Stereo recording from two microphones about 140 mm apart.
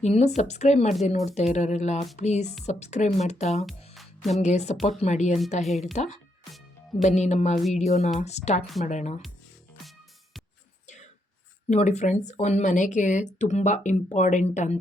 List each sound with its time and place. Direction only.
0.0 s speech: 50° left (ahead or behind)
3.7 s music: centre (ahead or behind)
4.4 s speech: 55° left (ahead or behind)
10.8 s whispering: 60° left (ahead or behind)
11.7 s speech: 55° left (ahead or behind)